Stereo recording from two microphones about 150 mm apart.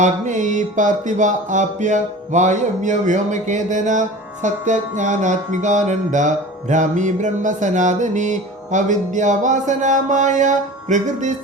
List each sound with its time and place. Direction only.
0.0 s music: 55° right (ahead or behind)